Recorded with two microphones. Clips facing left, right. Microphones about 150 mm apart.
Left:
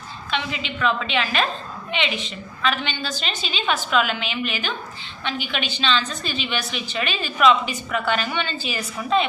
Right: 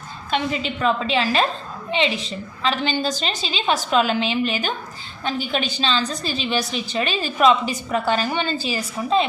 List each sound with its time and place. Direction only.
0.3 s a woman's voice: 40° right (ahead or behind)